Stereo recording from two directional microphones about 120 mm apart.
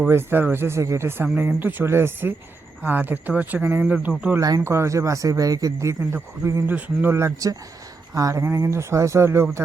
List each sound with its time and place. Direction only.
0.1 s a man's voice: 20° right (ahead or behind)
4.4 s a man's voice: 30° right (ahead or behind)
6.7 s a man's voice: 15° right (ahead or behind)